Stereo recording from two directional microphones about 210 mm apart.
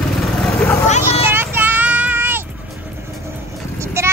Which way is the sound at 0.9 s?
30° left (ahead or behind).